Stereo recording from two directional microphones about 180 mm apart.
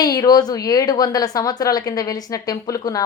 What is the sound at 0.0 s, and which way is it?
A woman's voice, 20° left (ahead or behind).